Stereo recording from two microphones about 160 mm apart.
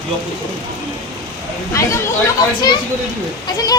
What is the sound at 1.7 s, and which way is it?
Speech, 20° left (ahead or behind).